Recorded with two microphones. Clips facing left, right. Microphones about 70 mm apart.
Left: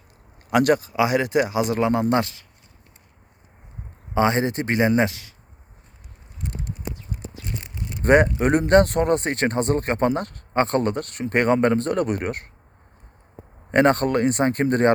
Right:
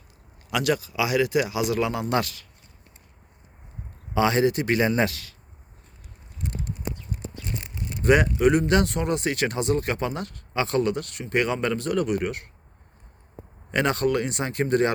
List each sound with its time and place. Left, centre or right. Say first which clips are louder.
0.5 s speech: left 6 dB; left
4.1 s speech: left 1 dB; left
8.0 s speech: left 2 dB; left
13.7 s speech: left 5 dB; left